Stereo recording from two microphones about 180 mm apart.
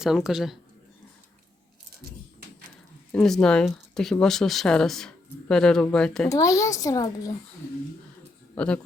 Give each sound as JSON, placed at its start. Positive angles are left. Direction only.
{"t": 0.0, "sound": "speech", "side_deg": 0}
{"t": 3.1, "sound": "speech", "side_deg": 5}
{"t": 6.2, "sound": "speech", "side_deg": 20}
{"t": 8.5, "sound": "speech", "side_deg": 5}